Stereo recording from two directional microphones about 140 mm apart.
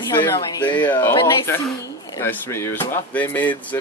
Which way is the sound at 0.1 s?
30° left (ahead or behind).